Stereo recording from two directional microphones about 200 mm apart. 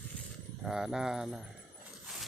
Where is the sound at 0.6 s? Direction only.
Centre (ahead or behind).